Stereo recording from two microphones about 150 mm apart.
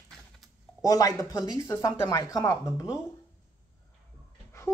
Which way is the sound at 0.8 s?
25° left (ahead or behind).